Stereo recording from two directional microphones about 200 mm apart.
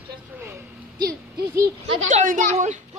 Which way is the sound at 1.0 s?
45° right (ahead or behind).